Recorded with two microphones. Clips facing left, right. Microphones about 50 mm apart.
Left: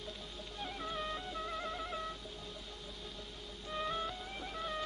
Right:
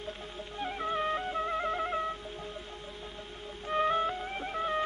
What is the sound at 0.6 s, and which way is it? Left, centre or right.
Music, right.